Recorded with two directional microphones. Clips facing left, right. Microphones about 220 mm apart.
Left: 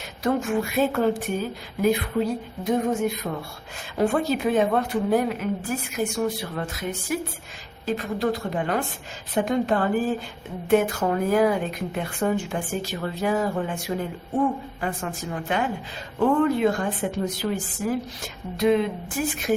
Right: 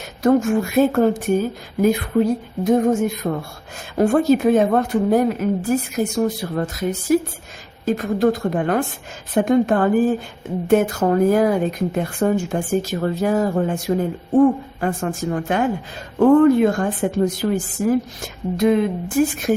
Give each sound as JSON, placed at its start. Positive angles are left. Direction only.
{"t": 0.2, "sound": "a woman's voice", "side_deg": -45}